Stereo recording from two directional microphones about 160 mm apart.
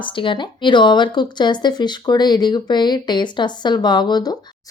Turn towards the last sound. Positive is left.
turn(degrees=25)  # may be behind; listen again after turning